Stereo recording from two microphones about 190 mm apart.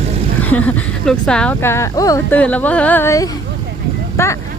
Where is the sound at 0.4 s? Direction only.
10° left (ahead or behind).